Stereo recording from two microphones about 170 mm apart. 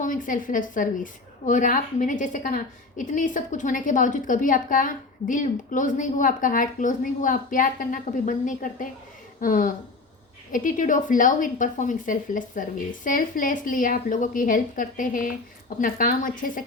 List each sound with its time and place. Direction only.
0.0 s a woman's voice: 50° left (ahead or behind)